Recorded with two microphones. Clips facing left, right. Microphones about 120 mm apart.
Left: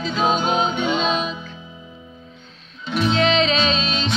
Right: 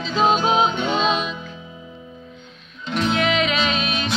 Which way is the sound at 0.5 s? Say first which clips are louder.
Right 2 dB; 40° right (ahead or behind).